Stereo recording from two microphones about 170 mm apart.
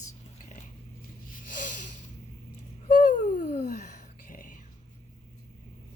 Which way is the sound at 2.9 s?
55° left (ahead or behind).